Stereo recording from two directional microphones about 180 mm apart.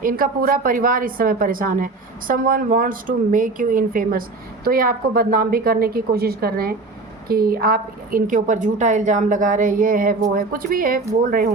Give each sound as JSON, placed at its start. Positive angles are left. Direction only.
{"t": 0.0, "sound": "a woman's voice", "side_deg": -50}